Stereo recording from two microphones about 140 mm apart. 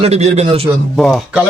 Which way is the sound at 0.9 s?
5° left (ahead or behind).